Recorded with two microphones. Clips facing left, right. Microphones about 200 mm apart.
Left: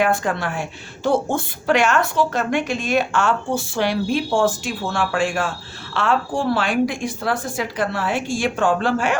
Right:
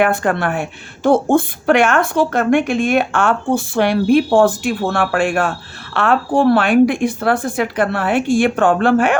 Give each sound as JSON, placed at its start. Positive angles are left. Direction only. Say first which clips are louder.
{"t": 0.0, "sound": "a woman's voice", "louder": "right 4 dB", "side_deg": -60}